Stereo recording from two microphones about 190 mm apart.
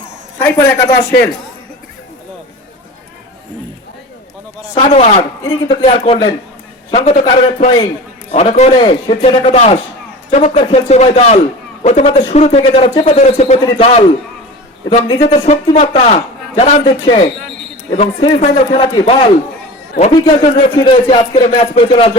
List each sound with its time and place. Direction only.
0.3 s a man's voice: 10° left (ahead or behind)
4.7 s a man's voice: 35° left (ahead or behind)
5.4 s a man's voice: 20° left (ahead or behind)
5.7 s a man's voice: 30° left (ahead or behind)